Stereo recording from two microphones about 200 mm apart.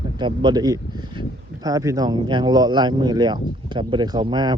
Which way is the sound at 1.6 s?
15° right (ahead or behind).